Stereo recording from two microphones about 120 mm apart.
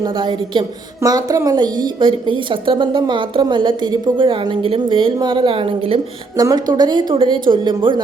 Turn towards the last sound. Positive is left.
turn(degrees=-45)  # may be behind; listen again after turning